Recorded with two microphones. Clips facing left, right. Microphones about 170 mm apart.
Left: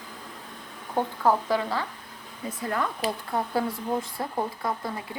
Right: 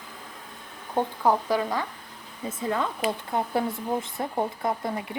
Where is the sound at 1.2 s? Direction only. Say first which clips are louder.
Even; 15° right (ahead or behind).